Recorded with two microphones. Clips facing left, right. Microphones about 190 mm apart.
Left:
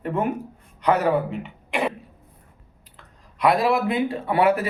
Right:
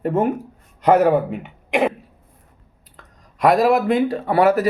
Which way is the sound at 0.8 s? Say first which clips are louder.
Right 6 dB; 50° right (ahead or behind).